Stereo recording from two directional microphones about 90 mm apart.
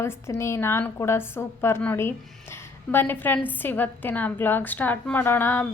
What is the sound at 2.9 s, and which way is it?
A woman's voice, 25° left (ahead or behind).